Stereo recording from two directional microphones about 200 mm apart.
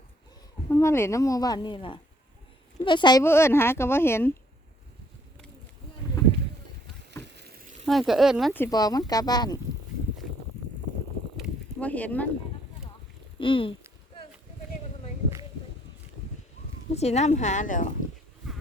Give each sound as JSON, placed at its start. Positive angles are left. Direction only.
{"t": 0.7, "sound": "speech", "side_deg": 15}
{"t": 7.1, "sound": "a sound", "side_deg": -60}
{"t": 7.9, "sound": "speech", "side_deg": 0}
{"t": 8.5, "sound": "speech", "side_deg": 15}
{"t": 11.3, "sound": "a sound", "side_deg": 5}
{"t": 13.4, "sound": "speech", "side_deg": 25}
{"t": 16.9, "sound": "speech", "side_deg": 30}